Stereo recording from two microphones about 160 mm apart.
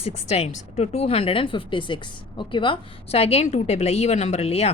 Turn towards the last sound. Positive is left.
turn(degrees=40)  # may be behind; listen again after turning